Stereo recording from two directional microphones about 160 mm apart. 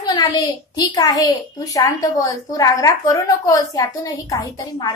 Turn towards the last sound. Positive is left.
turn(degrees=25)  # may be behind; listen again after turning